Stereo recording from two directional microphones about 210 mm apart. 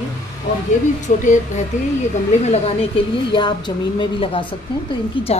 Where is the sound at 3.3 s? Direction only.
20° left (ahead or behind).